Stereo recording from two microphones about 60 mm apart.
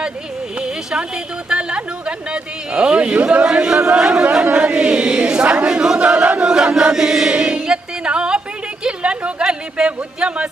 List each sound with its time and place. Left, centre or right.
0.5 s a woman's voice: centre
6.0 s chant: centre
8.8 s a sound: centre